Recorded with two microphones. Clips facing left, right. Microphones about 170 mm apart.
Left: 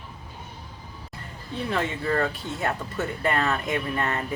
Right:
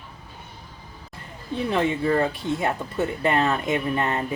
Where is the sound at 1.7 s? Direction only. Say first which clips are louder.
Right 4 dB; 20° right (ahead or behind).